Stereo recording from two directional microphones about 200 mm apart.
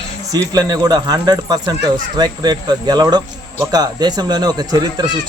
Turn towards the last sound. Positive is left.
turn(degrees=-20)  # may be behind; listen again after turning